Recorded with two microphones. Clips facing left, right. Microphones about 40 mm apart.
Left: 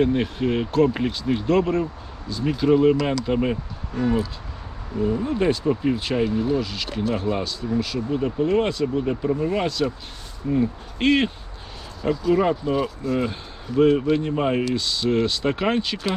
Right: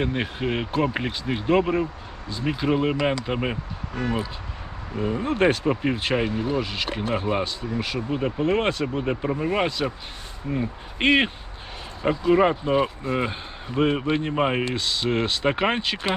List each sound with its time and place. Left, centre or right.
0.0 s speech: centre
3.9 s speech: right
4.9 s speech: right
5.3 s speech: right
5.6 s speech: right